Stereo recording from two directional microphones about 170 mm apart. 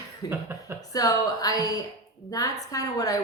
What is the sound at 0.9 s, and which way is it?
A woman's voice, 20° left (ahead or behind).